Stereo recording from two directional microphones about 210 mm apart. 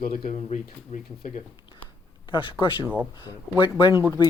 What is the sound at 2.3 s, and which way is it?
Speech, 25° left (ahead or behind).